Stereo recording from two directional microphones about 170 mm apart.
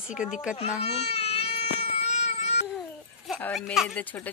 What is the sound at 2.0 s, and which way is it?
Cat, 40° left (ahead or behind).